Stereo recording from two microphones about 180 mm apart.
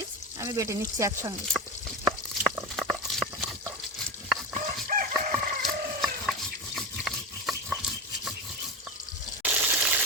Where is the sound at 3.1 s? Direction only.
Centre (ahead or behind).